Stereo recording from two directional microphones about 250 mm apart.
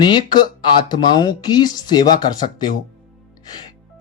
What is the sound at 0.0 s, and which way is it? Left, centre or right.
Speech, centre.